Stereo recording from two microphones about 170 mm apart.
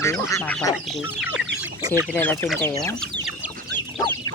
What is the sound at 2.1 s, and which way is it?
Speech, 10° left (ahead or behind).